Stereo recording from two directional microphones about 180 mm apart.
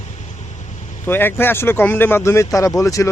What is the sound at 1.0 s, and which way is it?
Speech, 10° left (ahead or behind).